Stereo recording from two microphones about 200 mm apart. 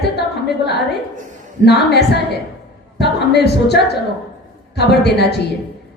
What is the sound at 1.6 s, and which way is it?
A woman's voice, 55° left (ahead or behind).